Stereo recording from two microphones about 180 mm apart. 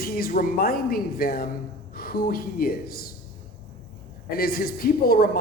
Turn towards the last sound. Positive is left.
turn(degrees=55)  # may be behind; listen again after turning